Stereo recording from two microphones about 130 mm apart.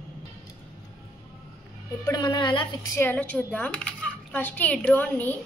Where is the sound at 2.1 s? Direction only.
35° left (ahead or behind).